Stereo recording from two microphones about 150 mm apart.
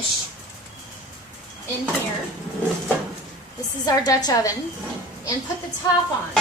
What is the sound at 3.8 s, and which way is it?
Speech, 25° left (ahead or behind).